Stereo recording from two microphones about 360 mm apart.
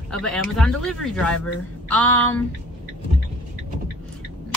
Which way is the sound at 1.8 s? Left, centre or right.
Centre.